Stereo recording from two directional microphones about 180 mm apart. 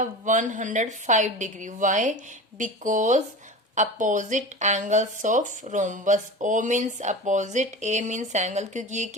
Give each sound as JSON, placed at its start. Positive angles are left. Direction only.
{"t": 0.0, "sound": "speech", "side_deg": -45}